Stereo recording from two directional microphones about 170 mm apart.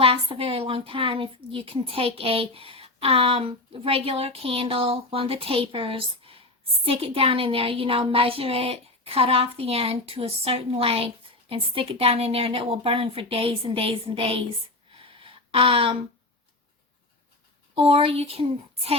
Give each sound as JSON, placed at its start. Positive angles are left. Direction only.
{"t": 0.0, "sound": "a woman's voice", "side_deg": -35}
{"t": 14.9, "sound": "a sound", "side_deg": -30}
{"t": 17.7, "sound": "a woman's voice", "side_deg": -30}